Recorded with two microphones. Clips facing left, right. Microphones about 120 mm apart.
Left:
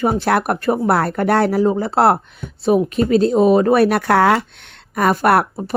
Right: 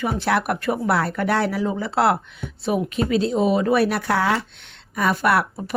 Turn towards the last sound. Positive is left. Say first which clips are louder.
# left 5 dB
turn(degrees=50)  # may be behind; listen again after turning